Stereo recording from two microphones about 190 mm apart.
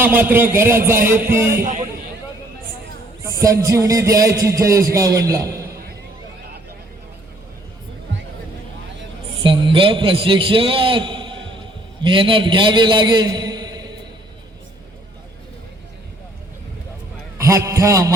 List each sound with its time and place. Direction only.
0.0 s a man's voice: 10° right (ahead or behind)
3.2 s a man's voice: 15° right (ahead or behind)
9.4 s a man's voice: 25° right (ahead or behind)
17.3 s a sound: 15° right (ahead or behind)